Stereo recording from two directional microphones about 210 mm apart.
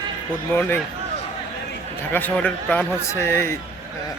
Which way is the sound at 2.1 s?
10° left (ahead or behind).